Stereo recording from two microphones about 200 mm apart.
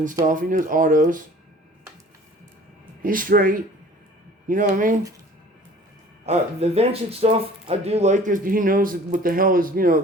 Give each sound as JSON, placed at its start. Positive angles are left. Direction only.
{"t": 0.3, "sound": "speech", "side_deg": -40}
{"t": 3.0, "sound": "speech", "side_deg": -45}
{"t": 6.2, "sound": "speech", "side_deg": -30}